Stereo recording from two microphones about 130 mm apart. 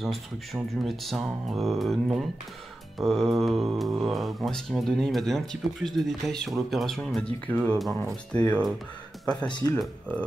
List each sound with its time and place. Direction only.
0.0 s speech: centre (ahead or behind)
7.5 s speech: 15° left (ahead or behind)
9.5 s speech: 35° left (ahead or behind)
9.8 s speech: 10° left (ahead or behind)